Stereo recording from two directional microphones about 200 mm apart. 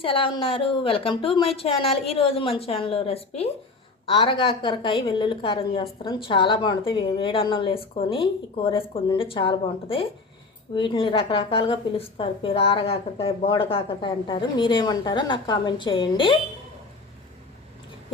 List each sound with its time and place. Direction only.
0.0 s a woman's voice: 25° left (ahead or behind)